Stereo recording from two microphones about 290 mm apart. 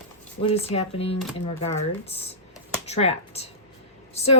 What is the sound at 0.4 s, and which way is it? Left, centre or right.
Speech, centre.